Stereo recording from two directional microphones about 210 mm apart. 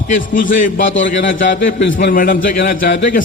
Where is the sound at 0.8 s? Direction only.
65° left (ahead or behind).